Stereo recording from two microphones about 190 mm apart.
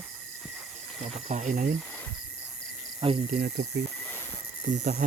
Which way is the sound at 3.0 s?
25° right (ahead or behind).